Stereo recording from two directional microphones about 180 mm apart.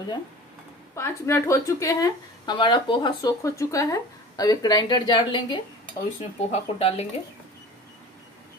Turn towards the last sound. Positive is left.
turn(degrees=35)  # may be behind; listen again after turning